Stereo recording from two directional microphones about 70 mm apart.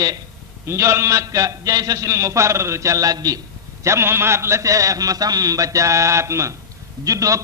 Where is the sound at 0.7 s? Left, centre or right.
Right.